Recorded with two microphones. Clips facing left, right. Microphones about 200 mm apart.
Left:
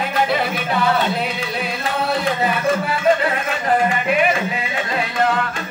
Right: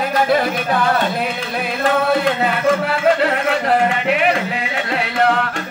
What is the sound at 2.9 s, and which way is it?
Music, 70° right (ahead or behind).